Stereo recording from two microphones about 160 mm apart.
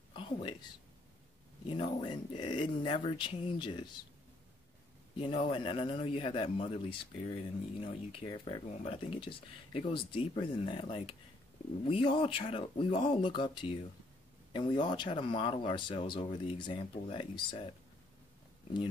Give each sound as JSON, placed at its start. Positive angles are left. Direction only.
{"t": 0.1, "sound": "whispering", "side_deg": 30}
{"t": 1.8, "sound": "speech", "side_deg": 30}
{"t": 5.2, "sound": "speech", "side_deg": 30}